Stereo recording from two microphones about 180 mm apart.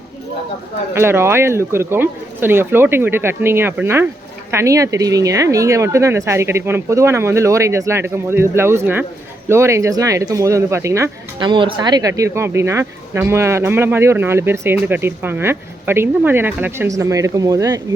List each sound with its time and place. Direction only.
0.9 s speech: 15° right (ahead or behind)